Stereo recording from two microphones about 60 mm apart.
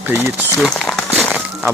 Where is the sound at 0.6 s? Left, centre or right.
Centre.